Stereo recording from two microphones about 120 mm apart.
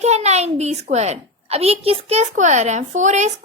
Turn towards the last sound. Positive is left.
turn(degrees=-80)